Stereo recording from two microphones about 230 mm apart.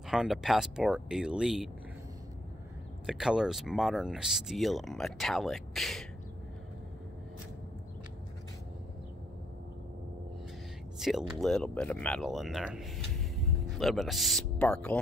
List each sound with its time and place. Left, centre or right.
0.1 s speech: centre
3.1 s speech: centre
11.0 s speech: centre